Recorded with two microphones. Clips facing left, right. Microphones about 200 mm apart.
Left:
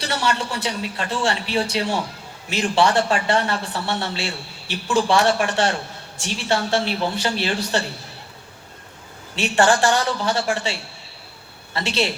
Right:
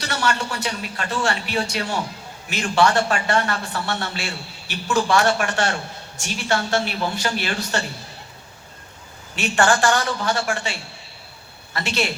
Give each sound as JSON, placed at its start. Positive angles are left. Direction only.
{"t": 0.0, "sound": "a man's voice", "side_deg": 30}
{"t": 9.3, "sound": "a man's voice", "side_deg": 30}